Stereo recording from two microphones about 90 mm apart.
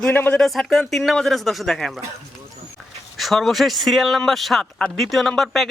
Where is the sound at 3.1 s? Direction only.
Centre (ahead or behind).